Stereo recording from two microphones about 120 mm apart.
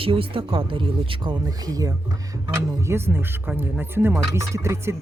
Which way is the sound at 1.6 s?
30° right (ahead or behind).